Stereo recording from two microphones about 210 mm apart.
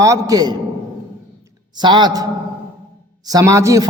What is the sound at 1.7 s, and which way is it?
Speech, 20° right (ahead or behind).